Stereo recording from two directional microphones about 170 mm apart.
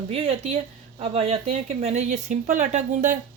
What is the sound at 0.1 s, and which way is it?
Speech, 35° right (ahead or behind).